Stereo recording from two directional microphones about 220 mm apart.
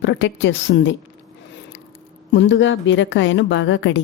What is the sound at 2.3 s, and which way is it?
A woman's voice, 55° left (ahead or behind).